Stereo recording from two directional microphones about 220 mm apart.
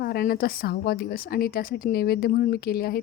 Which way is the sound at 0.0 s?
45° left (ahead or behind).